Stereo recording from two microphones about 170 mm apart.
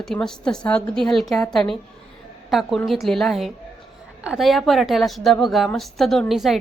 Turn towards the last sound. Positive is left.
turn(degrees=0)  # may be behind; listen again after turning